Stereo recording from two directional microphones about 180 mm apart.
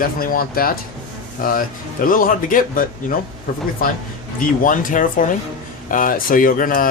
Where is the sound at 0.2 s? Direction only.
55° left (ahead or behind).